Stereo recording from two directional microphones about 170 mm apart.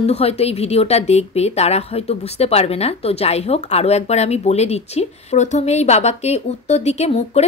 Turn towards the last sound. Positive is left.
turn(degrees=40)  # may be behind; listen again after turning